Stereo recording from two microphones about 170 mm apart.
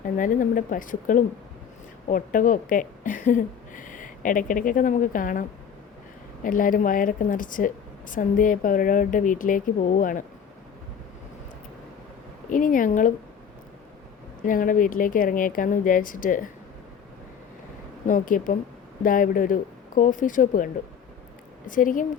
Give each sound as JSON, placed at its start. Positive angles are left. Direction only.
{"t": 0.2, "sound": "a woman's voice", "side_deg": 50}
{"t": 12.5, "sound": "a woman's voice", "side_deg": 50}
{"t": 14.4, "sound": "a woman's voice", "side_deg": 50}
{"t": 18.0, "sound": "a woman's voice", "side_deg": 50}
{"t": 21.7, "sound": "a woman's voice", "side_deg": 50}